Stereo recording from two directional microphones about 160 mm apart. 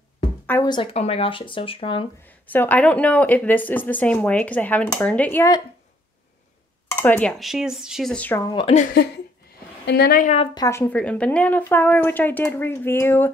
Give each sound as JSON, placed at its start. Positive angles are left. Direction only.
{"t": 0.5, "sound": "speech", "side_deg": 15}
{"t": 0.9, "sound": "speech", "side_deg": 40}
{"t": 2.2, "sound": "speech", "side_deg": 10}
{"t": 6.9, "sound": "speech", "side_deg": 10}
{"t": 8.5, "sound": "a woman's voice", "side_deg": 30}
{"t": 9.8, "sound": "a woman's voice", "side_deg": 85}
{"t": 10.2, "sound": "speech", "side_deg": 40}
{"t": 10.5, "sound": "speech", "side_deg": 20}